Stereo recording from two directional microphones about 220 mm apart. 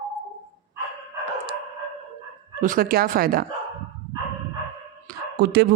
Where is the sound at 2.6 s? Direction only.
40° right (ahead or behind).